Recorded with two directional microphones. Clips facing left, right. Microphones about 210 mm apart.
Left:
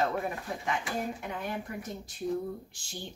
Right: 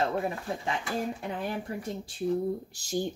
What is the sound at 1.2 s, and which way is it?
Speech, 30° right (ahead or behind).